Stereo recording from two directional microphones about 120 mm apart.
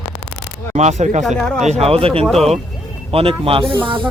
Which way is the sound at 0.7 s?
70° right (ahead or behind).